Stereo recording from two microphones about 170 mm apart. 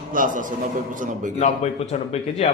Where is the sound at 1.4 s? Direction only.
40° left (ahead or behind).